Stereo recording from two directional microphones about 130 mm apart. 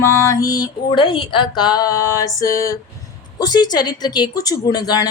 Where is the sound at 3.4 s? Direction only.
30° left (ahead or behind).